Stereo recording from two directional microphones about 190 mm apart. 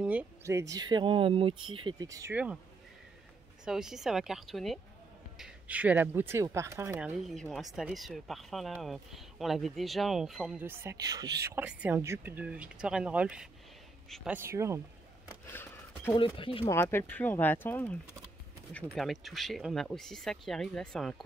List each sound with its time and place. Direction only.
0.0 s speech: 5° right (ahead or behind)
3.6 s speech: 5° right (ahead or behind)
7.2 s speech: centre (ahead or behind); by 11.6 s 20° right (ahead or behind)
11.6 s speech: 10° right (ahead or behind)
14.3 s speech: 15° right (ahead or behind)
15.4 s speech: 10° left (ahead or behind)
16.2 s speech: 30° left (ahead or behind)
16.7 s speech: 10° left (ahead or behind)
18.9 s speech: centre (ahead or behind)